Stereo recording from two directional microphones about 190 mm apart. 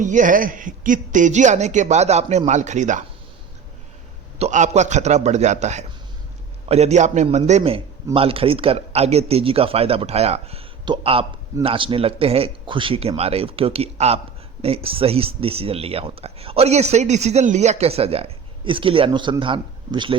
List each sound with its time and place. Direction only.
0.0 s speech: 40° right (ahead or behind)
4.4 s speech: 35° right (ahead or behind)